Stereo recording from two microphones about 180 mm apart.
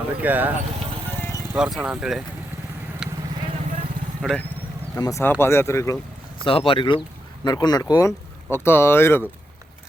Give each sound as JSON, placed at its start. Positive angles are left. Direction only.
{"t": 0.2, "sound": "speech", "side_deg": -10}
{"t": 1.5, "sound": "speech", "side_deg": -5}
{"t": 3.0, "sound": "vehicle", "side_deg": -5}
{"t": 4.2, "sound": "speech", "side_deg": 0}
{"t": 4.9, "sound": "speech", "side_deg": 20}
{"t": 6.4, "sound": "speech", "side_deg": 30}